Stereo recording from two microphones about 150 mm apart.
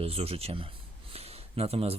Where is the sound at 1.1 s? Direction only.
40° right (ahead or behind).